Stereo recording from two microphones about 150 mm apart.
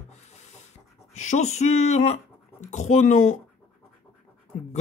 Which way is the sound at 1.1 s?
55° left (ahead or behind).